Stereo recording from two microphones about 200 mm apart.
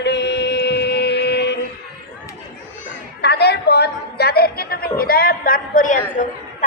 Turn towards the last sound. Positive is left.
turn(degrees=40)  # may be behind; listen again after turning